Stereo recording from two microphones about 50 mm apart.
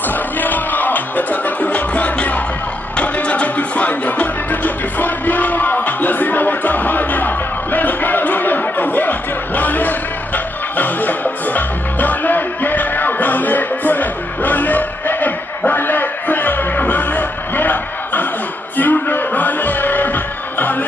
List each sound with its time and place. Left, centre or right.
0.4 s music: left